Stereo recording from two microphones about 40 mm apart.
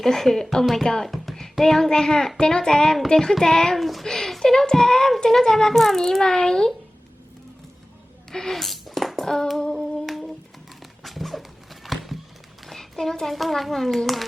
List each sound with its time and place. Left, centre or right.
0.0 s a child's voice: centre
1.1 s a child's voice: centre
3.8 s a child's voice: centre
8.3 s a sound: centre
10.1 s humming: centre
11.0 s horse: centre
12.6 s a child's voice: centre